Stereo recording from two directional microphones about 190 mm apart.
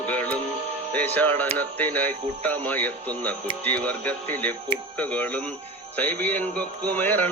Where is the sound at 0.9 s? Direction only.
10° left (ahead or behind).